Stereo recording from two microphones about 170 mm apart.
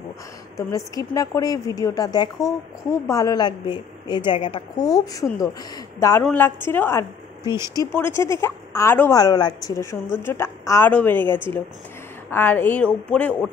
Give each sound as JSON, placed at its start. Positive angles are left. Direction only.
{"t": 0.6, "sound": "a woman's voice", "side_deg": 20}
{"t": 7.5, "sound": "speech", "side_deg": -15}
{"t": 7.8, "sound": "a woman's voice", "side_deg": 15}